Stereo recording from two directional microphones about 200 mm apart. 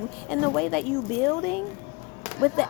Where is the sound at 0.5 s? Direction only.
5° left (ahead or behind).